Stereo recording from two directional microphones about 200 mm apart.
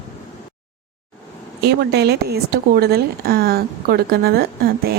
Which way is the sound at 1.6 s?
55° right (ahead or behind).